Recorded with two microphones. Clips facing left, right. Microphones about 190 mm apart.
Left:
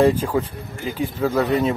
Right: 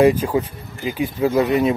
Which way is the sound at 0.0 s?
15° right (ahead or behind).